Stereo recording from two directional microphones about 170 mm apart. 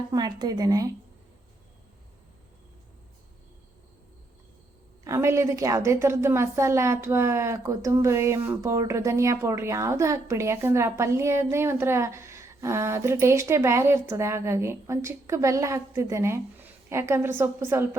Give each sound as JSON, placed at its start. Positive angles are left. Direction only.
{"t": 0.1, "sound": "a woman's voice", "side_deg": -25}
{"t": 5.0, "sound": "a woman's voice", "side_deg": -15}